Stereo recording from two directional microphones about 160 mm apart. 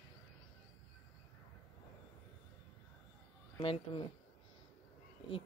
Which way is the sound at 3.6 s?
35° left (ahead or behind).